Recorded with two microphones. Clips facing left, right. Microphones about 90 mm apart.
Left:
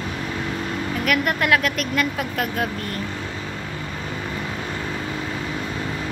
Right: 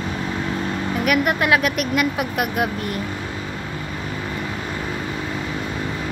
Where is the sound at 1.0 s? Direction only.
20° right (ahead or behind).